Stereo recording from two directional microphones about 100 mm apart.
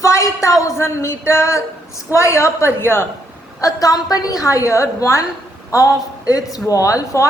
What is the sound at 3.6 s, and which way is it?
A woman's voice, 35° left (ahead or behind).